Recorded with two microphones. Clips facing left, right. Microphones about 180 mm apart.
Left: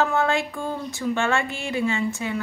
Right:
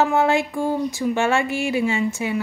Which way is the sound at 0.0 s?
15° right (ahead or behind).